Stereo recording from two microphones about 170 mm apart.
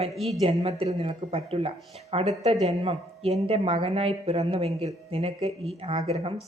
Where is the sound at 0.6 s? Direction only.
35° right (ahead or behind).